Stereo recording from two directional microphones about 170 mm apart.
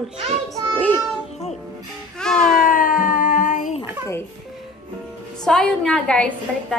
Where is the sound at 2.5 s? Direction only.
55° left (ahead or behind).